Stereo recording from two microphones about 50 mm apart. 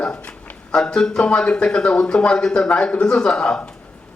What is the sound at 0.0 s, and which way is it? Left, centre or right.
Speech, left.